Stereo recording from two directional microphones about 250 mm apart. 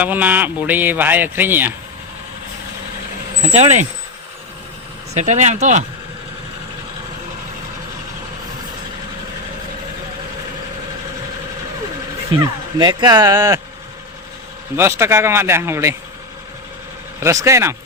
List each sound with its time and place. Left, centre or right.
0.0 s speech: centre
3.4 s speech: right
5.1 s speech: right
12.4 s speech: centre
14.8 s speech: centre
17.2 s speech: centre